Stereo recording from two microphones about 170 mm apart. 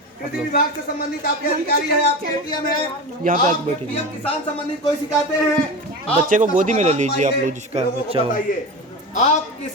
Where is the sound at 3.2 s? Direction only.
50° right (ahead or behind).